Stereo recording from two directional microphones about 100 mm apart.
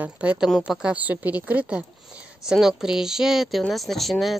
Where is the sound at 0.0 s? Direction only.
15° right (ahead or behind).